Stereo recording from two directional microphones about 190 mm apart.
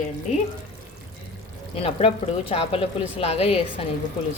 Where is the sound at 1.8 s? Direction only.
30° left (ahead or behind).